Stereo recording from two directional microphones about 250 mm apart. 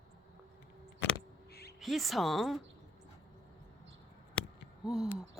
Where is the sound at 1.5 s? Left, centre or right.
Left.